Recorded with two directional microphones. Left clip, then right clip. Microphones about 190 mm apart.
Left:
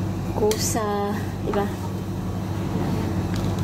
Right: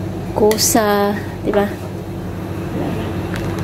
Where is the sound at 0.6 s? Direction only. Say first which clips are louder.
Right 10 dB; 35° right (ahead or behind).